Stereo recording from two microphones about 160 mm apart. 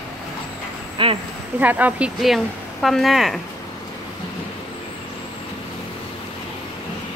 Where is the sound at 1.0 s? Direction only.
30° right (ahead or behind).